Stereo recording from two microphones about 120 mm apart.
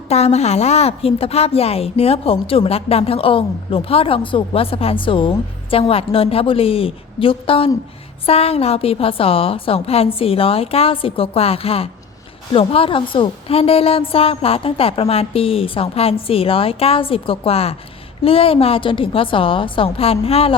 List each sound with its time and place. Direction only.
0.1 s a woman's voice: 60° left (ahead or behind)